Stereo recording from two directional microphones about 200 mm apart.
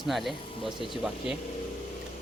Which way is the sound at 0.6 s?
25° left (ahead or behind).